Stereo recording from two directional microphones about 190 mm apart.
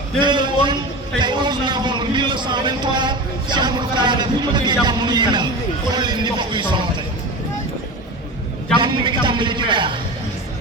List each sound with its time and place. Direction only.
0.2 s a sound: 25° right (ahead or behind)
1.2 s a man's voice: 25° right (ahead or behind)
8.8 s a man's voice: 25° right (ahead or behind)